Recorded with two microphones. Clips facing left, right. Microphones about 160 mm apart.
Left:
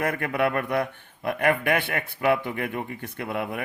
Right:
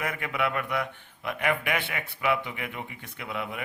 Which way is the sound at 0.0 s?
45° left (ahead or behind).